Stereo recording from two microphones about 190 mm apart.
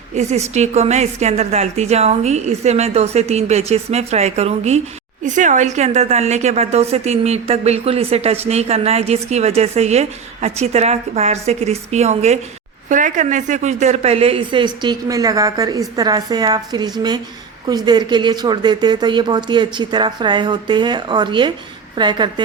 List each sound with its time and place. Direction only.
0.1 s a woman's voice: 35° right (ahead or behind)